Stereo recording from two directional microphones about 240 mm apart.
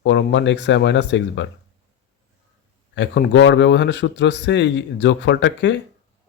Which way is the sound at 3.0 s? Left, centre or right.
Left.